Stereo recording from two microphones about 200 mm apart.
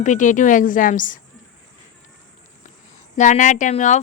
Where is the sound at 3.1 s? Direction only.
40° left (ahead or behind).